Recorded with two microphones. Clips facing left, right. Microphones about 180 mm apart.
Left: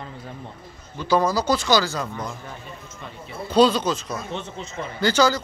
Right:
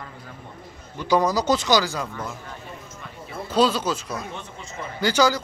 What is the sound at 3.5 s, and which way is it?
Speech, 5° right (ahead or behind).